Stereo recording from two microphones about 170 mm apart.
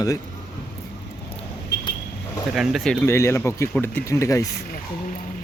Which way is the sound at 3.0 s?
15° left (ahead or behind).